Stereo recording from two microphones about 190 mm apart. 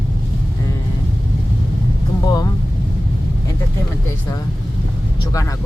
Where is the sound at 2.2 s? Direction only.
20° left (ahead or behind).